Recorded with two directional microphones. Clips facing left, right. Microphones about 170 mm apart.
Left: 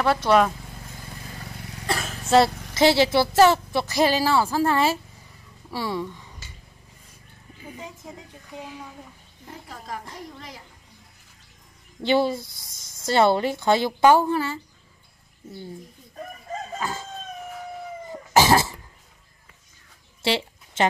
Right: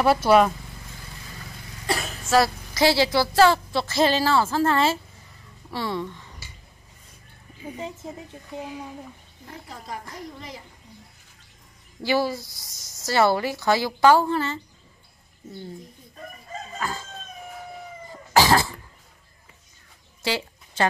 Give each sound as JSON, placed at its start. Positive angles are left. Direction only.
{"t": 0.0, "sound": "speech", "side_deg": -10}
{"t": 1.9, "sound": "vehicle", "side_deg": 0}
{"t": 2.2, "sound": "a woman's voice", "side_deg": 25}
{"t": 8.0, "sound": "speech", "side_deg": -25}
{"t": 9.7, "sound": "a woman's voice", "side_deg": 0}
{"t": 12.0, "sound": "speech", "side_deg": 25}
{"t": 12.4, "sound": "speech", "side_deg": 55}
{"t": 13.0, "sound": "a woman's voice", "side_deg": 25}
{"t": 16.8, "sound": "chicken", "side_deg": 20}
{"t": 18.3, "sound": "sneeze", "side_deg": 20}
{"t": 20.2, "sound": "a sound", "side_deg": 25}